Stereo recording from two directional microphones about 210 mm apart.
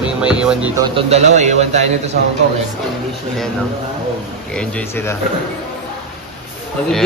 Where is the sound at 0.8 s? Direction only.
30° right (ahead or behind).